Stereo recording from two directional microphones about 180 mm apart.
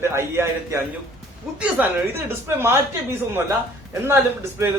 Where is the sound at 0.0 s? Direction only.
15° right (ahead or behind).